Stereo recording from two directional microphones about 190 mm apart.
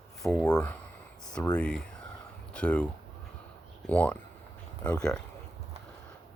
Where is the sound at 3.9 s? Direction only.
5° left (ahead or behind).